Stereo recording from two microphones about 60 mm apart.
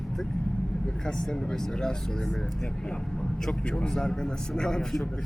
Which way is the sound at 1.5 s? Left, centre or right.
Centre.